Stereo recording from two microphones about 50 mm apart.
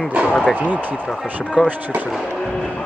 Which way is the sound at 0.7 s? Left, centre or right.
Right.